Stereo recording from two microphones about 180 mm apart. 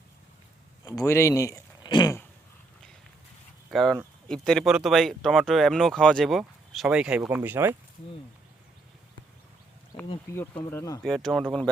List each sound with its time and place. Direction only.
0.9 s speech: 15° left (ahead or behind)
3.7 s speech: centre (ahead or behind)
9.9 s insect: 25° left (ahead or behind)
10.3 s speech: 10° left (ahead or behind)
11.0 s speech: centre (ahead or behind)